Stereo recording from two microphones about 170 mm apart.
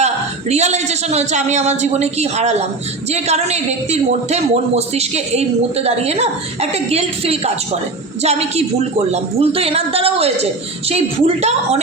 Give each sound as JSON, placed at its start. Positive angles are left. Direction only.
{"t": 0.0, "sound": "a man's voice", "side_deg": -40}